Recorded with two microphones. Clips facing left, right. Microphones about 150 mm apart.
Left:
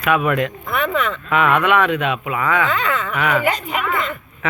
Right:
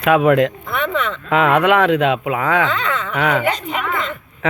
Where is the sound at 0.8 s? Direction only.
Centre (ahead or behind).